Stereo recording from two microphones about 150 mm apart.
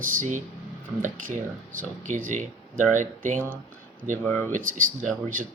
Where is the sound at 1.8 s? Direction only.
65° right (ahead or behind).